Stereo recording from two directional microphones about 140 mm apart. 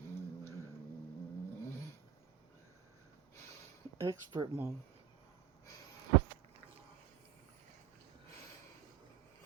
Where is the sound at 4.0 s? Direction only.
30° right (ahead or behind).